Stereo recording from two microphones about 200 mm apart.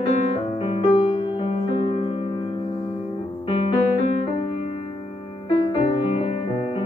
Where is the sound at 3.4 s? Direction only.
30° left (ahead or behind).